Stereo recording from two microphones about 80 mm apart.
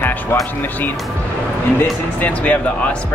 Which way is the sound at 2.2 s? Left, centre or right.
Centre.